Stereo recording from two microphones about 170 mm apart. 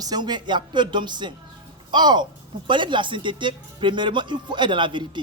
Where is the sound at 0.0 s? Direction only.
25° right (ahead or behind).